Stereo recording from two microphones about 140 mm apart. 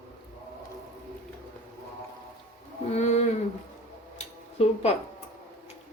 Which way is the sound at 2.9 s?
50° left (ahead or behind).